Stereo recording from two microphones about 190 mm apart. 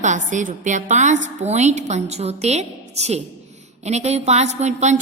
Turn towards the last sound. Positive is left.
turn(degrees=-35)  # may be behind; listen again after turning